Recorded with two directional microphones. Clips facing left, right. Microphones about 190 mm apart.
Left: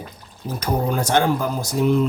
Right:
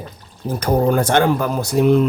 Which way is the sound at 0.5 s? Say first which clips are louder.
Right 6 dB; 55° right (ahead or behind).